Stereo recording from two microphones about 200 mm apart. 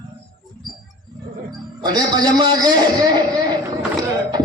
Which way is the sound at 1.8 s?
20° right (ahead or behind).